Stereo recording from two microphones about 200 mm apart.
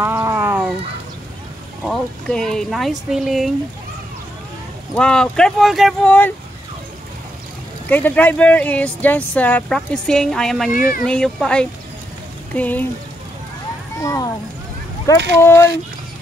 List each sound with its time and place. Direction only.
0.0 s a sound: 15° right (ahead or behind)
1.9 s speech: 5° left (ahead or behind)
4.9 s speech: 5° left (ahead or behind)
7.9 s speech: 10° left (ahead or behind)
14.0 s speech: 15° left (ahead or behind)
15.1 s speech: 60° right (ahead or behind)